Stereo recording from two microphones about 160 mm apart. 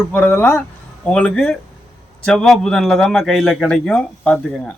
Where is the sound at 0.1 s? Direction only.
10° left (ahead or behind).